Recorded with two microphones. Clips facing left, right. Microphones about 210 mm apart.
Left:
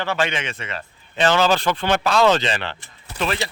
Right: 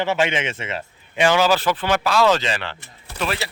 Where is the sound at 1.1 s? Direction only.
10° right (ahead or behind).